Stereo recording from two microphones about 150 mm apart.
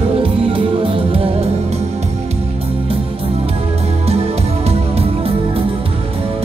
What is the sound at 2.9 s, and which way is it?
Music, 40° right (ahead or behind).